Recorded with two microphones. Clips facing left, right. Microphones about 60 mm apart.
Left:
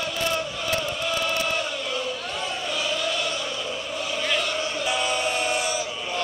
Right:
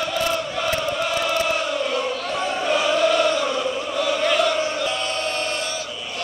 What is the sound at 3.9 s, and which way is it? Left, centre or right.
Chant, right.